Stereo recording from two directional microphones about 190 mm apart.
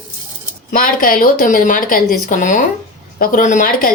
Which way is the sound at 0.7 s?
45° left (ahead or behind).